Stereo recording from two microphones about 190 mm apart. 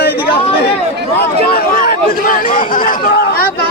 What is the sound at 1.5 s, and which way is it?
Speech, 50° left (ahead or behind).